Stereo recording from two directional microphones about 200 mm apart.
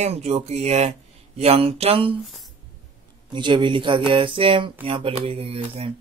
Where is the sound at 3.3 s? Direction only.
25° right (ahead or behind).